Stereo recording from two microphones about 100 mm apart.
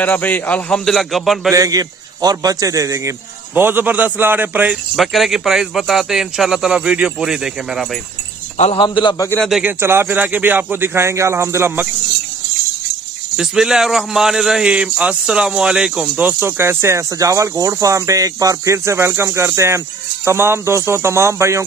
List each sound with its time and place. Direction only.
0.0 s a man's voice: 15° left (ahead or behind); by 1.5 s centre (ahead or behind)
1.5 s a man's voice: 35° right (ahead or behind)
3.5 s speech: 20° right (ahead or behind)
4.9 s speech: centre (ahead or behind)
8.7 s a man's voice: 50° left (ahead or behind)
9.6 s speech: 20° right (ahead or behind)
13.4 s speech: 5° right (ahead or behind)
16.3 s speech: 20° right (ahead or behind)